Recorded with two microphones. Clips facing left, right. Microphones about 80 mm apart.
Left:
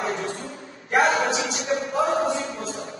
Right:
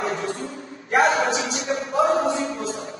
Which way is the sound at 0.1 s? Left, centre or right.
Right.